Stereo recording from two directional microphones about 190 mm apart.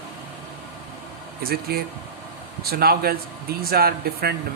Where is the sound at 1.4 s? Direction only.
55° right (ahead or behind).